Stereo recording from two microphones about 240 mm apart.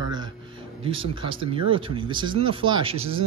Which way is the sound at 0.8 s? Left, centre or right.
Right.